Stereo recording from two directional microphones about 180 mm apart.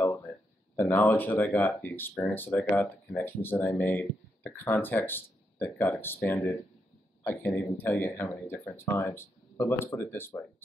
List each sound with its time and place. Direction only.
0.7 s speech: 10° left (ahead or behind)